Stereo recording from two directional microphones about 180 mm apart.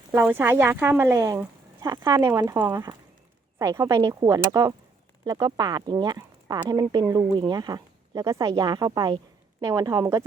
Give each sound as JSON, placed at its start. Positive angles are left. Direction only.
{"t": 0.1, "sound": "speech", "side_deg": -15}